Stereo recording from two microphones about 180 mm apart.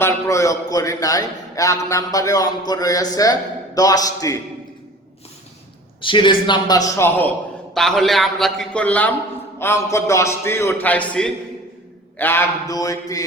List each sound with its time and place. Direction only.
0.0 s a man's voice: 15° left (ahead or behind)
6.0 s a man's voice: 25° left (ahead or behind)
7.7 s a man's voice: centre (ahead or behind); by 13.2 s 20° left (ahead or behind)